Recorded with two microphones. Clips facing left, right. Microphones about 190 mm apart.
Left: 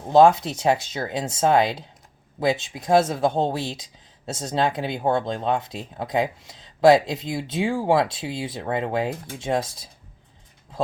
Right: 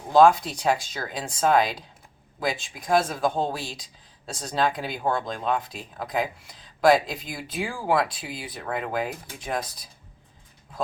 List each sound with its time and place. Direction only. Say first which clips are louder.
0.1 s speech: left 2 dB; 25° left (ahead or behind)